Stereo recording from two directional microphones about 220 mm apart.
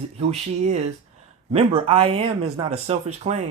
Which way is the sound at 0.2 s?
30° right (ahead or behind).